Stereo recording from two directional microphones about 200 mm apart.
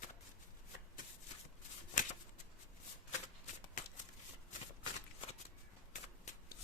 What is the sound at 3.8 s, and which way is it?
Shuffling cards, 40° left (ahead or behind).